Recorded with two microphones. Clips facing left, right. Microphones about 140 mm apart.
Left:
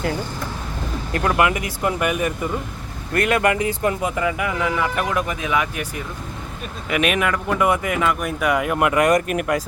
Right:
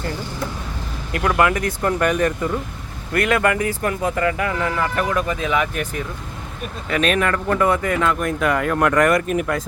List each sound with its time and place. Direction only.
1.3 s speech: 20° left (ahead or behind)
3.2 s speech: 25° left (ahead or behind)
9.2 s speech: 5° left (ahead or behind)